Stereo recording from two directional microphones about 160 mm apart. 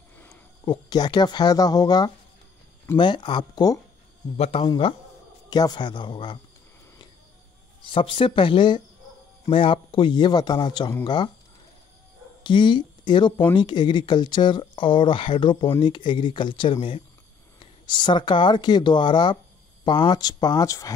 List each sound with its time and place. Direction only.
0.7 s speech: 25° left (ahead or behind)
4.4 s speech: 35° left (ahead or behind)
7.8 s speech: 35° left (ahead or behind)
12.4 s speech: 30° left (ahead or behind)